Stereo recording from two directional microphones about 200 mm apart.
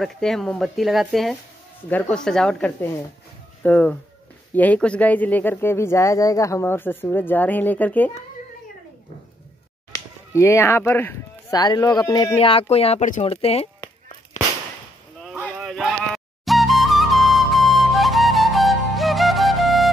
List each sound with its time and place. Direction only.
0.0 s speech: centre (ahead or behind)
9.9 s speech: 15° left (ahead or behind); by 13.7 s 30° left (ahead or behind)
14.3 s whip: 40° left (ahead or behind)
15.5 s flute: centre (ahead or behind)